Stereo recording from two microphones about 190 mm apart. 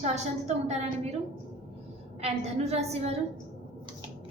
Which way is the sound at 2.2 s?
35° right (ahead or behind).